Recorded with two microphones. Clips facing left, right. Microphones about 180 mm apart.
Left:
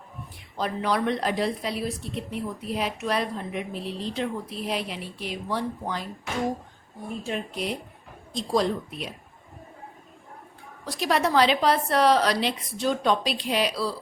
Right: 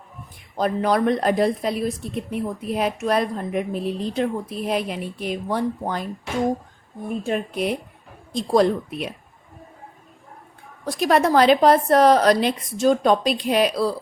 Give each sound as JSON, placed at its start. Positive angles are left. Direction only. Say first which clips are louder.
{"t": 0.5, "sound": "speech", "louder": "right 6 dB", "side_deg": -45}
{"t": 7.3, "sound": "speech", "louder": "right 6 dB", "side_deg": -55}
{"t": 10.8, "sound": "speech", "louder": "right 6 dB", "side_deg": -50}